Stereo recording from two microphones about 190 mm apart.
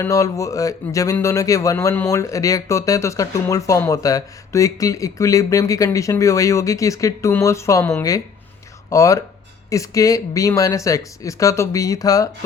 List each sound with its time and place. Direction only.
0.0 s speech: 15° left (ahead or behind)